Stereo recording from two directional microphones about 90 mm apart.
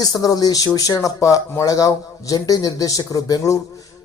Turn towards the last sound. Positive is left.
turn(degrees=40)  # may be behind; listen again after turning